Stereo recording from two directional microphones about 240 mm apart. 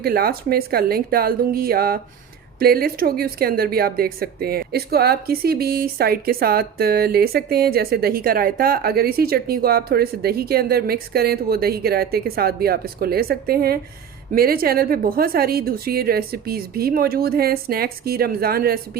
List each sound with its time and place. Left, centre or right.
0.0 s speech: right